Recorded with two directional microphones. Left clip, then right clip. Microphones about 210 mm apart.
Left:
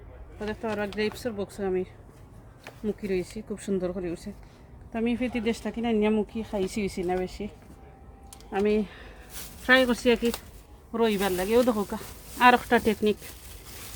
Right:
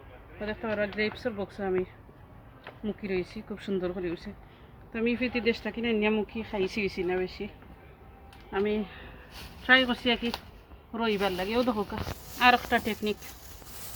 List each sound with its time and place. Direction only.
0.4 s speech: 50° left (ahead or behind)
8.5 s speech: 55° left (ahead or behind)
10.9 s speech: 45° left (ahead or behind)